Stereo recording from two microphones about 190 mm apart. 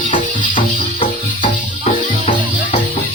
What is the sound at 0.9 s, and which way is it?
Music, 30° left (ahead or behind).